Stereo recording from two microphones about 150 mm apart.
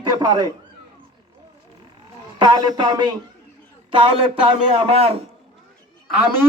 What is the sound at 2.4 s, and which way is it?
Speech, 30° right (ahead or behind).